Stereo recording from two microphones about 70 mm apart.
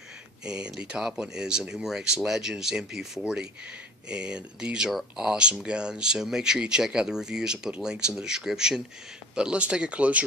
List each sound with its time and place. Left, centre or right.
0.5 s speech: centre
4.1 s speech: centre